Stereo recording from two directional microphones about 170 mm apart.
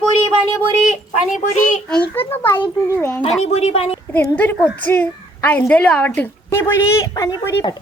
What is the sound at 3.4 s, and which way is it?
Speech, 40° left (ahead or behind).